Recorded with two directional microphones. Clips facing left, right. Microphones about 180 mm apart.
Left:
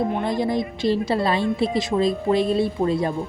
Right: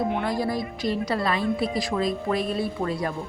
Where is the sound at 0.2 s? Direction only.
20° left (ahead or behind).